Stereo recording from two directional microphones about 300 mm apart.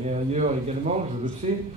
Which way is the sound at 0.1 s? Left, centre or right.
Right.